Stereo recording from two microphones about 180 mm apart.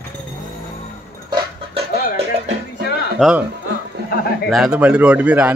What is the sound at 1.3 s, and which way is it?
Chicken, 30° right (ahead or behind).